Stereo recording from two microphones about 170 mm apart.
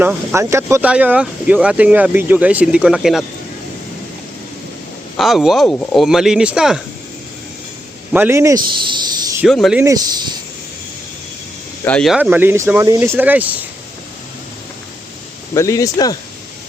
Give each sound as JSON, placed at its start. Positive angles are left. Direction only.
{"t": 0.0, "sound": "speech", "side_deg": -10}
{"t": 5.1, "sound": "speech", "side_deg": 0}
{"t": 8.1, "sound": "speech", "side_deg": -15}
{"t": 9.4, "sound": "speech", "side_deg": 0}
{"t": 9.8, "sound": "speech", "side_deg": -20}
{"t": 11.9, "sound": "speech", "side_deg": 5}
{"t": 15.5, "sound": "speech", "side_deg": 20}